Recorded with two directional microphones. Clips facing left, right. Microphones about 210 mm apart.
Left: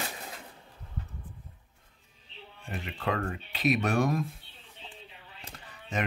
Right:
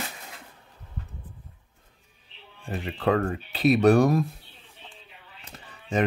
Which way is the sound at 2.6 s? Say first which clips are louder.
Right 7 dB; 30° right (ahead or behind).